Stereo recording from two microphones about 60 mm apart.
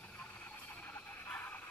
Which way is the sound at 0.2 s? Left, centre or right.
Left.